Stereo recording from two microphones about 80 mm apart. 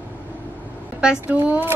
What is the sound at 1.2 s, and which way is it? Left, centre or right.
Speech, right.